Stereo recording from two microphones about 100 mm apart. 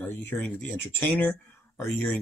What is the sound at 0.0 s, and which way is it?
Speech, 20° left (ahead or behind).